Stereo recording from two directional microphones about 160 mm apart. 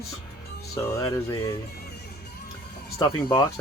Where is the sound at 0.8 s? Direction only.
20° left (ahead or behind).